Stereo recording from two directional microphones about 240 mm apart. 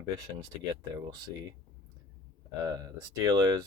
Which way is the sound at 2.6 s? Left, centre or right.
Centre.